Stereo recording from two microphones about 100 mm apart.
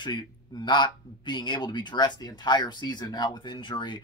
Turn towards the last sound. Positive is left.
turn(degrees=50)  # may be behind; listen again after turning